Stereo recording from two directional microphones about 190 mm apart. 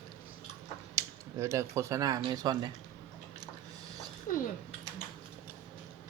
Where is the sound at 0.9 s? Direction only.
15° right (ahead or behind).